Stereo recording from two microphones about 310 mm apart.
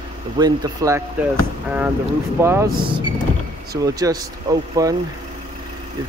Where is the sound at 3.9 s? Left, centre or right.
Centre.